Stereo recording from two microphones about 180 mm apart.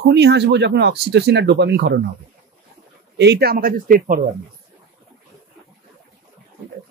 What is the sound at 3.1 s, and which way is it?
Speech, 65° right (ahead or behind).